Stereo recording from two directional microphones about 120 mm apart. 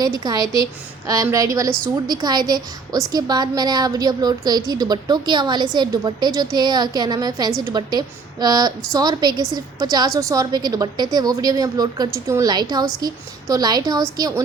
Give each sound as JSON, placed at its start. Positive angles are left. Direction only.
{"t": 0.0, "sound": "a woman's voice", "side_deg": -35}